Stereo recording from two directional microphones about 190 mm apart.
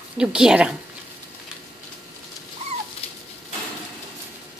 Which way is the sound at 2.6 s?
35° right (ahead or behind).